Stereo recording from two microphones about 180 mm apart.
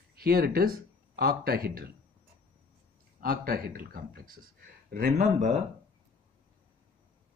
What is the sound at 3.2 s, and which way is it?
Speech, 55° right (ahead or behind).